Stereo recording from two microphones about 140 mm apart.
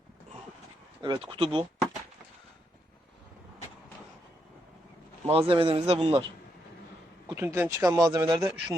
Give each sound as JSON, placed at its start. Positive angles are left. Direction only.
{"t": 1.0, "sound": "speech", "side_deg": -35}
{"t": 5.3, "sound": "a man's voice", "side_deg": -40}
{"t": 7.3, "sound": "speech", "side_deg": -15}